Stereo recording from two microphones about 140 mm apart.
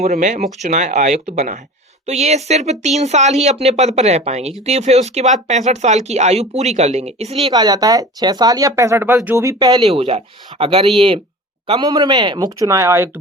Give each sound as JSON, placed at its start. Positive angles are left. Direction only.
{"t": 0.0, "sound": "speech", "side_deg": -60}
{"t": 7.5, "sound": "speech", "side_deg": -30}
{"t": 9.8, "sound": "speech", "side_deg": -40}
{"t": 11.8, "sound": "speech", "side_deg": -30}